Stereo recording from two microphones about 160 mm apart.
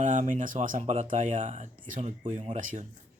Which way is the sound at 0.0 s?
50° right (ahead or behind).